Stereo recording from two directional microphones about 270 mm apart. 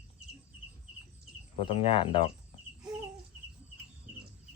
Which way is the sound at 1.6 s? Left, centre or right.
Centre.